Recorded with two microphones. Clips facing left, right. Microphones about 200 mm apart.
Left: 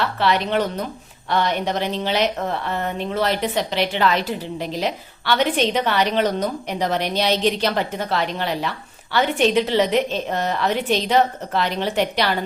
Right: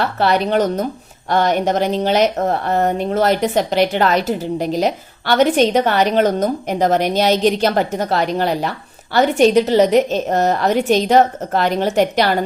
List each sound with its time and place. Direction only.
0.0 s a woman's voice: 45° right (ahead or behind)